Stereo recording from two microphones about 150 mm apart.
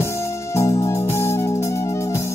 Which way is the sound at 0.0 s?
20° left (ahead or behind).